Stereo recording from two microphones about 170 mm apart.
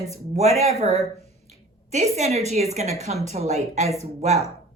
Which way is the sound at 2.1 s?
40° right (ahead or behind).